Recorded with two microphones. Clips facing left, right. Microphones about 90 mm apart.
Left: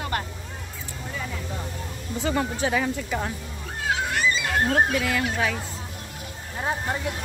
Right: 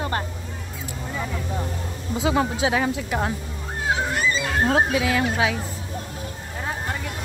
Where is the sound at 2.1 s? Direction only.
10° right (ahead or behind).